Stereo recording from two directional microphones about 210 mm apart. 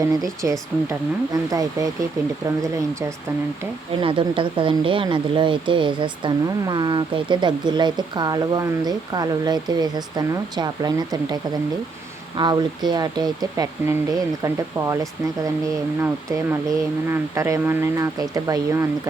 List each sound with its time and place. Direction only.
0.4 s speech: 10° right (ahead or behind)
4.0 s speech: 25° right (ahead or behind)
12.4 s speech: 20° right (ahead or behind)
15.4 s speech: 15° right (ahead or behind)